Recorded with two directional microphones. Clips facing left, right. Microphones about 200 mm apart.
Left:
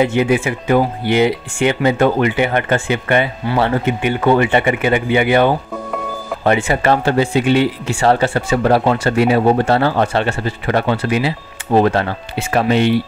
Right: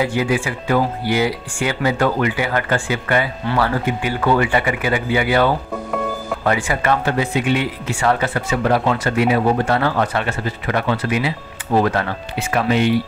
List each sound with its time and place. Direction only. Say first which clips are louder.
0.0 s speech: left 4 dB; 20° left (ahead or behind)